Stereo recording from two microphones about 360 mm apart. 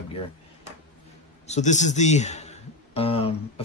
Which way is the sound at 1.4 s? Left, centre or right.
Centre.